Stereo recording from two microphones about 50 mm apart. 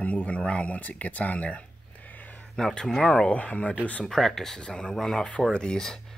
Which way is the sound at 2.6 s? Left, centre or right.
Centre.